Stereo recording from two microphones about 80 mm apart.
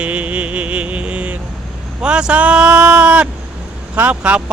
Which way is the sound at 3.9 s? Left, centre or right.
Centre.